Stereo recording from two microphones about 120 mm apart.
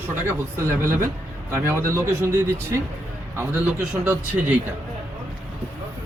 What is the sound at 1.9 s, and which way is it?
A man's voice, 20° right (ahead or behind).